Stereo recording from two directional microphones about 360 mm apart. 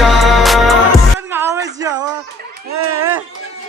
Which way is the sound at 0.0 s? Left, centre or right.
Centre.